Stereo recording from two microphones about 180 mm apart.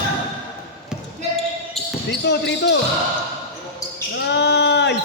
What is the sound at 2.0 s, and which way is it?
Speech, 70° left (ahead or behind).